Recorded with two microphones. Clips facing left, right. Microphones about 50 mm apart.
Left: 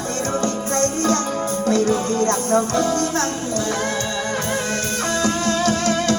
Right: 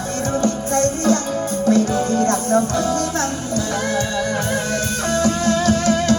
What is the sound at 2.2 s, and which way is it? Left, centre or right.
Music, left.